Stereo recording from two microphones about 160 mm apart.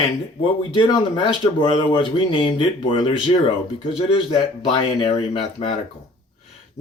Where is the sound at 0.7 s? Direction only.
30° left (ahead or behind).